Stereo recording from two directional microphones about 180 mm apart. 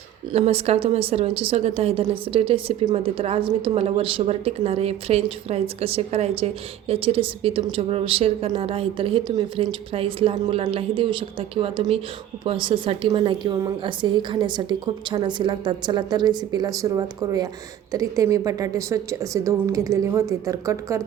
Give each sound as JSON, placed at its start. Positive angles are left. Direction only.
{"t": 0.3, "sound": "a woman's voice", "side_deg": -35}